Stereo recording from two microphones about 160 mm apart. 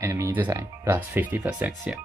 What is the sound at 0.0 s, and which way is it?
Speech, 15° right (ahead or behind).